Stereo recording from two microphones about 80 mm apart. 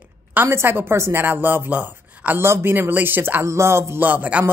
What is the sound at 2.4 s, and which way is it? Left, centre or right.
A woman's voice, right.